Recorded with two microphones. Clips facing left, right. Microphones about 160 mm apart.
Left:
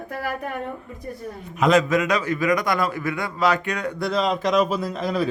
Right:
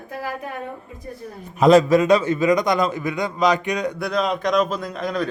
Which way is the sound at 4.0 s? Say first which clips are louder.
Even; centre (ahead or behind).